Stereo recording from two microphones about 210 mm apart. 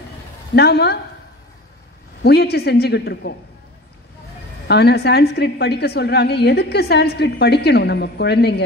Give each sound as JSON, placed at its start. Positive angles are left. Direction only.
{"t": 0.6, "sound": "a woman's voice", "side_deg": 50}
{"t": 2.2, "sound": "a woman's voice", "side_deg": 50}
{"t": 4.6, "sound": "a woman's voice", "side_deg": 50}